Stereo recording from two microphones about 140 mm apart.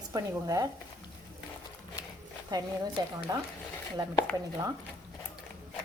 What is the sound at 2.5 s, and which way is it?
Speech, 25° right (ahead or behind).